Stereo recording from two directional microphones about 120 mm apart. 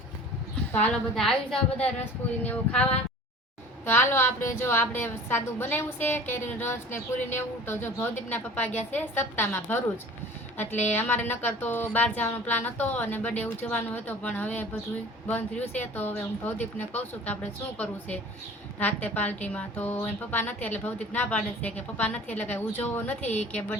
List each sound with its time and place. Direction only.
0.9 s a woman's voice: 5° left (ahead or behind)
3.8 s a woman's voice: 20° left (ahead or behind)
10.8 s a woman's voice: 15° left (ahead or behind)
18.8 s a woman's voice: 15° left (ahead or behind)